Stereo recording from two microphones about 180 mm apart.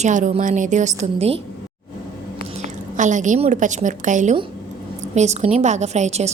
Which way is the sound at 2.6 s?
45° right (ahead or behind).